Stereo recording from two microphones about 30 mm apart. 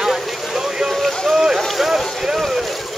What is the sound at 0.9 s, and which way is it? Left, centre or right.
Boat, centre.